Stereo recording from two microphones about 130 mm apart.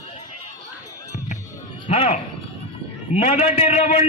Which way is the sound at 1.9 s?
55° left (ahead or behind).